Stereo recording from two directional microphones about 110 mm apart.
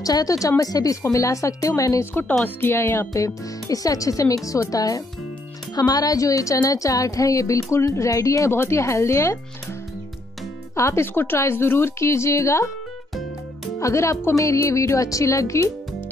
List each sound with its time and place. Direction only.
0.0 s a woman's voice: 35° left (ahead or behind)
10.8 s a woman's voice: 25° left (ahead or behind)
13.7 s a woman's voice: 25° left (ahead or behind)